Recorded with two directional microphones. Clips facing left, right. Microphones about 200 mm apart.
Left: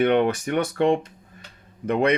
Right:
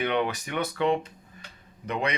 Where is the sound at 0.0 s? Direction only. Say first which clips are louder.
Left 8 dB; 50° left (ahead or behind).